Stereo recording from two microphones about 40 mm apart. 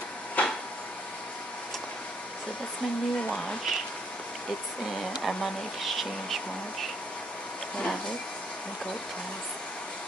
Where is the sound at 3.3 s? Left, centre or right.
Centre.